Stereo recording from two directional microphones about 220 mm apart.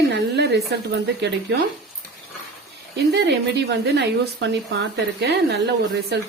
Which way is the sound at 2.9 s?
50° right (ahead or behind).